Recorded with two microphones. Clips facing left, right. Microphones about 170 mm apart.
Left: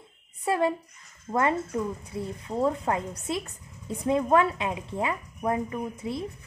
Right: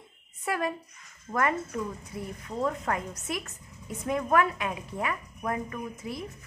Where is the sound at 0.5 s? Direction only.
25° left (ahead or behind).